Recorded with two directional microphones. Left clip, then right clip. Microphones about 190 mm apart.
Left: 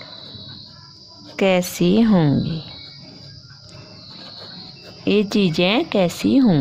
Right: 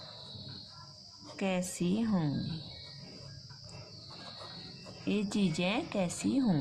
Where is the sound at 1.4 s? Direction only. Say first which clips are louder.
Left 17 dB; 50° left (ahead or behind).